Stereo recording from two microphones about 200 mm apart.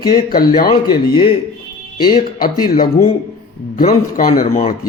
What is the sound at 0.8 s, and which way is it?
Speech, 25° left (ahead or behind).